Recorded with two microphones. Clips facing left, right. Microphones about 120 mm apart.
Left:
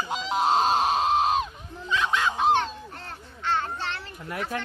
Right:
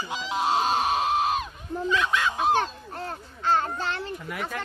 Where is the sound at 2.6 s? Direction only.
35° right (ahead or behind).